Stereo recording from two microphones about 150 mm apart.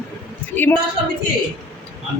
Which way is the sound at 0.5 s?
10° left (ahead or behind).